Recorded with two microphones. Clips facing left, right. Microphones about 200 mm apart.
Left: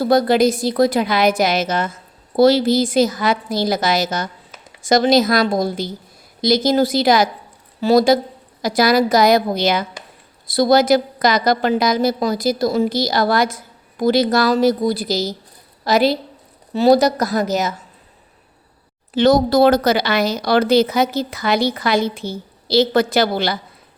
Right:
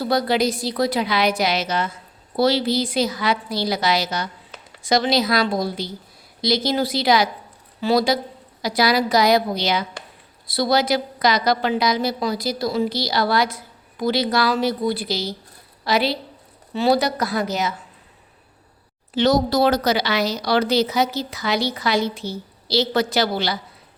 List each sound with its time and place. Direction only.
0.0 s a woman's voice: 45° left (ahead or behind)
19.1 s a woman's voice: 55° left (ahead or behind)